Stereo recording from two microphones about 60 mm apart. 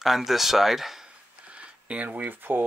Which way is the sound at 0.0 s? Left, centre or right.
Centre.